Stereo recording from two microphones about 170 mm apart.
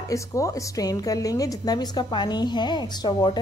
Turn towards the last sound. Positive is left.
turn(degrees=25)  # may be behind; listen again after turning